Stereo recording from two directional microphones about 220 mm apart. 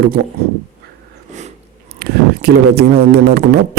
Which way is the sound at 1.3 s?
30° right (ahead or behind).